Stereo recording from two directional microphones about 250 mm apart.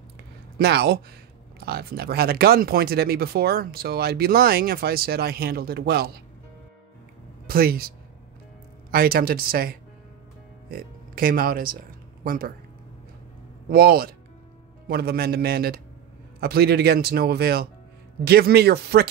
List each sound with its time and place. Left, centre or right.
0.6 s speech: right
7.4 s speech: right
8.9 s speech: right
13.7 s speech: right